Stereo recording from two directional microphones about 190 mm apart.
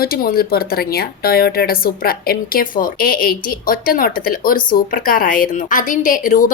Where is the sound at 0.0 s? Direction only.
50° left (ahead or behind).